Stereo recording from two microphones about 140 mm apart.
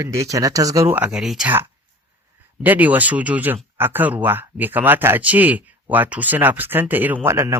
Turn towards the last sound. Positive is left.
turn(degrees=-20)  # may be behind; listen again after turning